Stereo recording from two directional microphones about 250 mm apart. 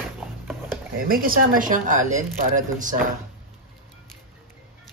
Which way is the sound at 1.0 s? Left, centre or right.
Right.